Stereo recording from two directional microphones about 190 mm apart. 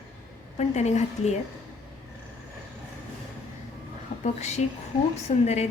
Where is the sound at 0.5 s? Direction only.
35° left (ahead or behind).